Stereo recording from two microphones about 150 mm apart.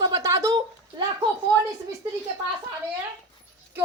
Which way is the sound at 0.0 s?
25° right (ahead or behind).